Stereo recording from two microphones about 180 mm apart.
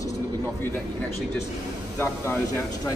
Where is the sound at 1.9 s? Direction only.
15° left (ahead or behind).